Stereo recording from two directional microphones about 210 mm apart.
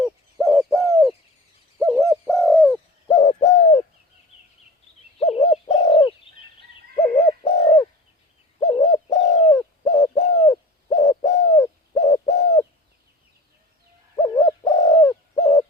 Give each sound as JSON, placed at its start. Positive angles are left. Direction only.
{"t": 0.0, "sound": "bird", "side_deg": 0}
{"t": 3.1, "sound": "bird", "side_deg": 20}
{"t": 5.2, "sound": "bird", "side_deg": 25}
{"t": 14.2, "sound": "bird", "side_deg": 15}